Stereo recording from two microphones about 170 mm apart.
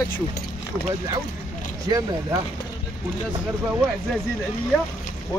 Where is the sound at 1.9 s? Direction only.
20° right (ahead or behind).